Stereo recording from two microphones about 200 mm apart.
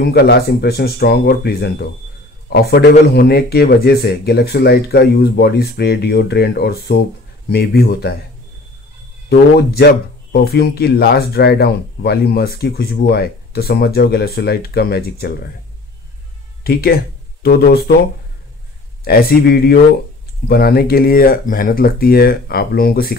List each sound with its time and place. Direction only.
0.0 s speech: 55° left (ahead or behind)
9.3 s speech: 55° left (ahead or behind)
16.6 s speech: 50° left (ahead or behind)
19.0 s speech: 50° left (ahead or behind)